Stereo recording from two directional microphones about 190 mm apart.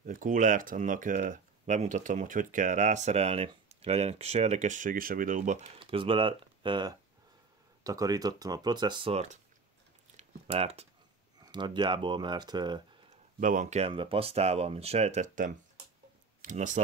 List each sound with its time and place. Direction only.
0.0 s speech: 45° right (ahead or behind)
5.8 s speech: 30° right (ahead or behind)
10.1 s a sound: 30° right (ahead or behind)
11.3 s speech: 20° right (ahead or behind)
13.4 s speech: 45° right (ahead or behind)